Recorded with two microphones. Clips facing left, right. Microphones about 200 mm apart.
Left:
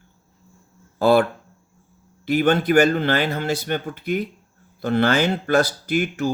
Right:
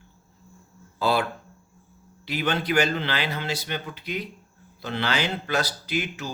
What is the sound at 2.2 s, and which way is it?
Speech, 50° left (ahead or behind).